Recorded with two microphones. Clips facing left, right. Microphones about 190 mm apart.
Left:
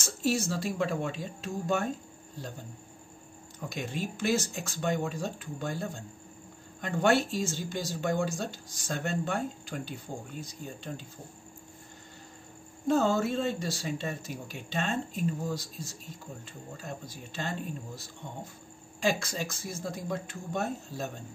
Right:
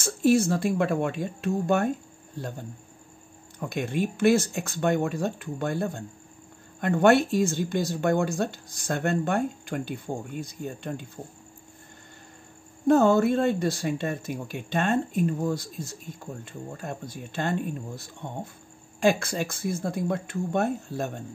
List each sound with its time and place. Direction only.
0.0 s speech: 55° right (ahead or behind)
3.5 s speech: 60° right (ahead or behind)
12.8 s speech: 55° right (ahead or behind)